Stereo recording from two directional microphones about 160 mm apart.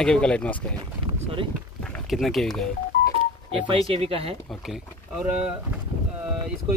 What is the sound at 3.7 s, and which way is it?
Speech, 35° right (ahead or behind).